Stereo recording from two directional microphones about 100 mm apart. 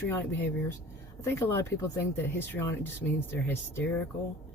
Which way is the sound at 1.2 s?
25° left (ahead or behind).